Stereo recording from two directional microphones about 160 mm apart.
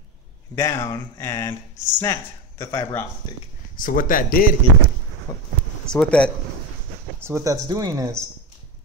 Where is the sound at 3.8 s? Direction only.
60° left (ahead or behind).